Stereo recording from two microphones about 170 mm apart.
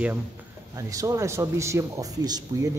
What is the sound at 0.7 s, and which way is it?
Speech, 20° right (ahead or behind).